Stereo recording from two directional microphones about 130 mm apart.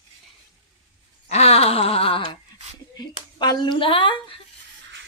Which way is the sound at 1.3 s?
55° left (ahead or behind).